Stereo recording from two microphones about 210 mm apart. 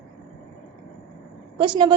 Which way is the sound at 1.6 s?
20° right (ahead or behind).